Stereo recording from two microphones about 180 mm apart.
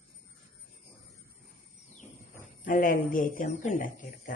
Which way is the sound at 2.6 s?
50° left (ahead or behind).